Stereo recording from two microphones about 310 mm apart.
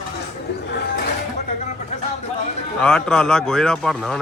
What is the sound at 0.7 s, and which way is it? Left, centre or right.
Speech, left.